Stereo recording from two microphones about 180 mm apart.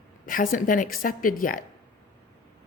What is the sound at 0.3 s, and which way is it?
A woman's voice, 50° left (ahead or behind).